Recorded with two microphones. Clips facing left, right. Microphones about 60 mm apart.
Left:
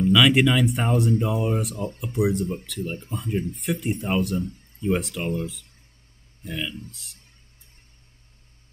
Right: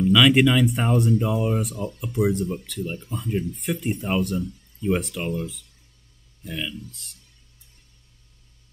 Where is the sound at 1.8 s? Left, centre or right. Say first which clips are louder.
Even; left.